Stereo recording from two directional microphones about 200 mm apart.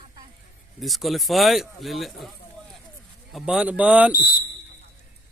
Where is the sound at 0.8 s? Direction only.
Centre (ahead or behind).